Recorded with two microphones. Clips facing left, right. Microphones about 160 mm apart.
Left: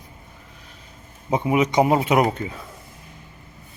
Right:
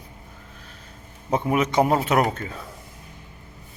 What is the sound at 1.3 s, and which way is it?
Speech, 10° left (ahead or behind).